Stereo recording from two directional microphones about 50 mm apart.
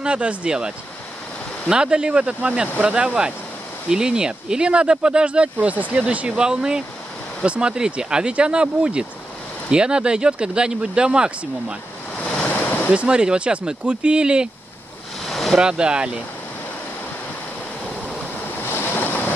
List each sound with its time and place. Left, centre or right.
0.0 s speech: right
12.2 s waves: centre
12.4 s a sound: left
12.9 s speech: right
15.2 s a sound: centre
15.6 s speech: centre
18.6 s waves: left